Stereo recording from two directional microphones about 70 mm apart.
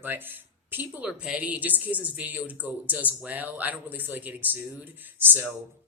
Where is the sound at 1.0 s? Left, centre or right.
Centre.